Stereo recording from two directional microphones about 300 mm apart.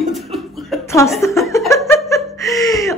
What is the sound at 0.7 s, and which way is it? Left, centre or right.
Chuckle, centre.